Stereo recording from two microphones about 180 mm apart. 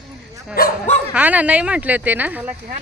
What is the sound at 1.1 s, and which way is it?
Speech, 10° right (ahead or behind).